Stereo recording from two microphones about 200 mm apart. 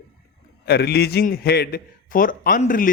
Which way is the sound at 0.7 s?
55° left (ahead or behind).